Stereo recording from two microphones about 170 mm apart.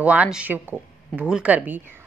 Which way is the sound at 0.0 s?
5° right (ahead or behind).